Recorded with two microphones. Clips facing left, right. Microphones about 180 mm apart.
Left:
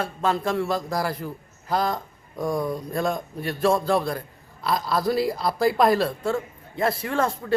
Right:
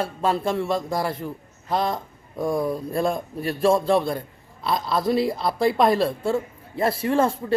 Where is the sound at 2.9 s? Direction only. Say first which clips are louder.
Right 2 dB; 30° right (ahead or behind).